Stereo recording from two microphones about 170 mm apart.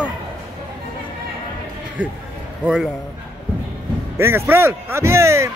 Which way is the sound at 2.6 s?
10° right (ahead or behind).